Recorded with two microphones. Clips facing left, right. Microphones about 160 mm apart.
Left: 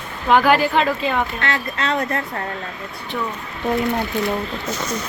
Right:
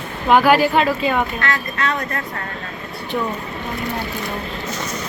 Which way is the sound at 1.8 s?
25° left (ahead or behind).